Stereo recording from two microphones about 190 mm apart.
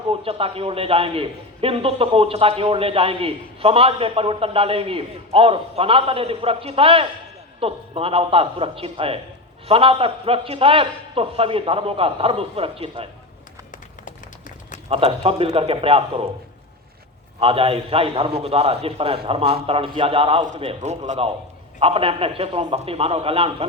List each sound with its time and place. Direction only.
0.1 s a man's voice: 30° right (ahead or behind)
14.8 s a man's voice: 30° right (ahead or behind)
17.4 s a man's voice: 30° right (ahead or behind)